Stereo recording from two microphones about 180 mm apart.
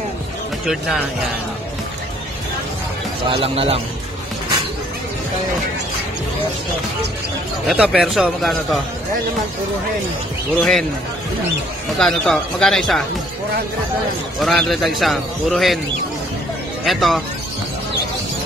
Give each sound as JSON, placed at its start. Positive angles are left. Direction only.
{"t": 3.3, "sound": "speech", "side_deg": -30}
{"t": 7.6, "sound": "a man's voice", "side_deg": -5}
{"t": 10.6, "sound": "a man's voice", "side_deg": 5}
{"t": 12.0, "sound": "a man's voice", "side_deg": 0}
{"t": 14.4, "sound": "a man's voice", "side_deg": 0}
{"t": 16.8, "sound": "a man's voice", "side_deg": 0}